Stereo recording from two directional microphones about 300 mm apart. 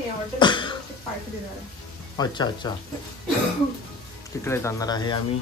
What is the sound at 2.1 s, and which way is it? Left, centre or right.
Speech, centre.